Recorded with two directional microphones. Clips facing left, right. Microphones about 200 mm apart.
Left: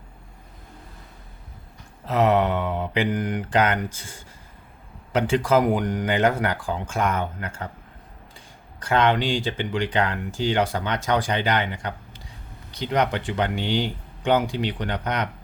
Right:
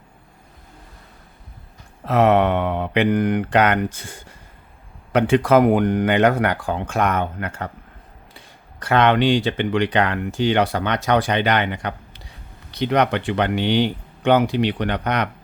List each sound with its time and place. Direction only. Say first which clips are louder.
2.0 s speech: right 4 dB; 60° right (ahead or behind)
8.8 s speech: right 4 dB; 65° right (ahead or behind)